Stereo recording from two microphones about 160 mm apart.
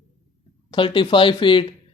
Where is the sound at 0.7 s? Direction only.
30° left (ahead or behind).